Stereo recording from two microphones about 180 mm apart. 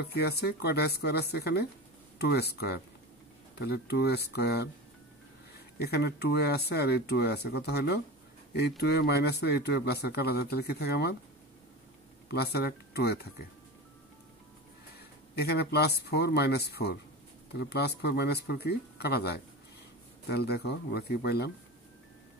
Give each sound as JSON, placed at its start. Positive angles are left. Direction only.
{"t": 0.0, "sound": "speech", "side_deg": 60}
{"t": 5.8, "sound": "speech", "side_deg": 60}
{"t": 12.3, "sound": "speech", "side_deg": 65}
{"t": 15.3, "sound": "speech", "side_deg": 65}